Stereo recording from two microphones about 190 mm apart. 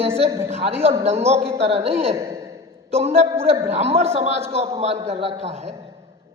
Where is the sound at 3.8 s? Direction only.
35° right (ahead or behind).